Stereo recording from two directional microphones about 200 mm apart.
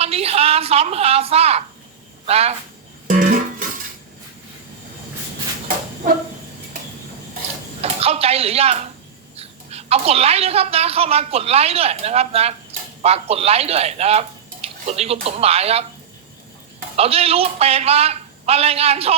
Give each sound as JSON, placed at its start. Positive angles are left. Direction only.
{"t": 0.0, "sound": "a woman's voice", "side_deg": -30}
{"t": 3.1, "sound": "music", "side_deg": -40}
{"t": 7.8, "sound": "a sound", "side_deg": -30}
{"t": 9.3, "sound": "a woman's voice", "side_deg": -30}
{"t": 17.0, "sound": "a man's voice", "side_deg": -30}